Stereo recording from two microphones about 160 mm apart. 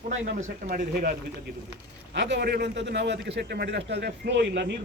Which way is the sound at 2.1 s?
90° right.